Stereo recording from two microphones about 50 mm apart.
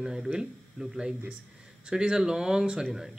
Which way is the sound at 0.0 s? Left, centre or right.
Centre.